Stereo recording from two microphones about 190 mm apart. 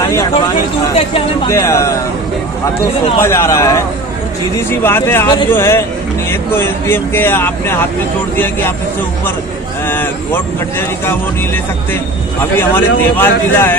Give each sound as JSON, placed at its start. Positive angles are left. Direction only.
{"t": 1.5, "sound": "speech", "side_deg": 15}
{"t": 3.2, "sound": "speech", "side_deg": 15}
{"t": 9.8, "sound": "speech", "side_deg": 10}
{"t": 12.4, "sound": "speech", "side_deg": 10}